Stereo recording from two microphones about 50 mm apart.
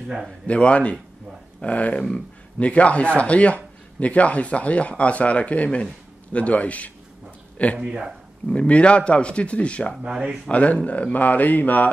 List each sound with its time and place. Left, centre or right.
0.5 s speech: left